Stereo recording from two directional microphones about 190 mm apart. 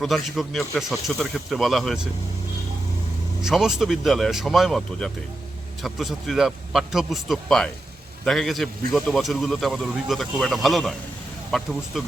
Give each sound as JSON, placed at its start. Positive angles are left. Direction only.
{"t": 0.0, "sound": "speech", "side_deg": 0}
{"t": 3.4, "sound": "speech", "side_deg": 0}